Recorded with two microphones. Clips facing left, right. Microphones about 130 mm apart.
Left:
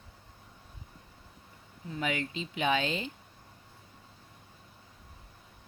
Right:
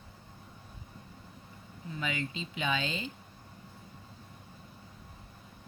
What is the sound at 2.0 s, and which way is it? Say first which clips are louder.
Speech: left 3 dB; 60° left (ahead or behind).